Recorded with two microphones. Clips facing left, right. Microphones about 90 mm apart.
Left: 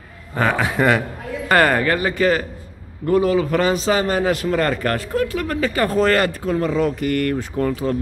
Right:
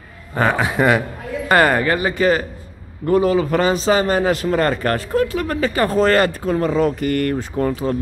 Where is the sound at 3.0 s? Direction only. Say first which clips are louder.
Right 1 dB; 35° right (ahead or behind).